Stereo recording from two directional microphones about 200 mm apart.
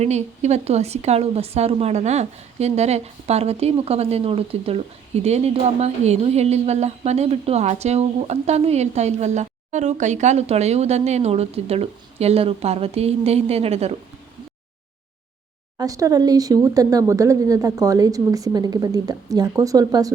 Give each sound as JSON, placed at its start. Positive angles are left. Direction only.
{"t": 0.0, "sound": "a woman's voice", "side_deg": -35}
{"t": 15.8, "sound": "speech", "side_deg": -15}